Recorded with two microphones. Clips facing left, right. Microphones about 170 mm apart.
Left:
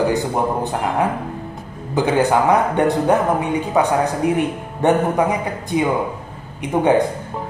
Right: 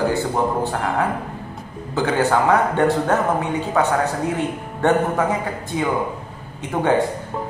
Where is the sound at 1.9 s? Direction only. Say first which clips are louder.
Left 2 dB; 15° left (ahead or behind).